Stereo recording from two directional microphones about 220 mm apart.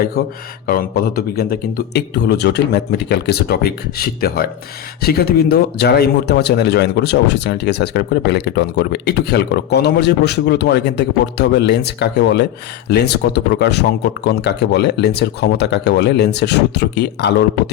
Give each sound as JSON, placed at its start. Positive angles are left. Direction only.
{"t": 0.2, "sound": "speech", "side_deg": 45}